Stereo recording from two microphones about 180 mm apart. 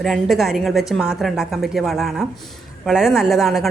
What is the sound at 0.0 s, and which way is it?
A woman's voice, centre (ahead or behind).